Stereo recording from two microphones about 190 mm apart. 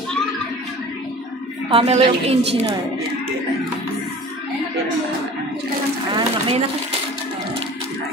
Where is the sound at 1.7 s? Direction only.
35° right (ahead or behind).